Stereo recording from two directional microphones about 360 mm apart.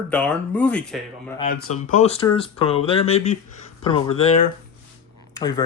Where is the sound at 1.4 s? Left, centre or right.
Left.